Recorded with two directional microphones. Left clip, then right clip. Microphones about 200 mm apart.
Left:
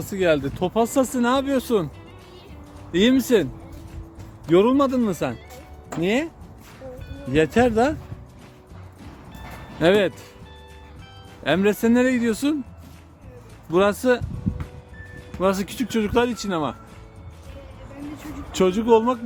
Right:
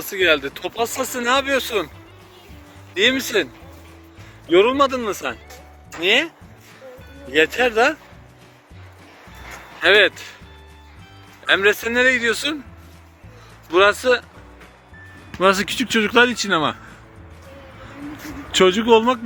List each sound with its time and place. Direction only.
0.0 s speech: 10° left (ahead or behind)
2.9 s speech: 10° left (ahead or behind)
9.8 s speech: 10° left (ahead or behind)
11.4 s speech: 10° left (ahead or behind)
13.7 s speech: 15° left (ahead or behind)
15.4 s speech: 10° left (ahead or behind)
18.5 s speech: 5° left (ahead or behind)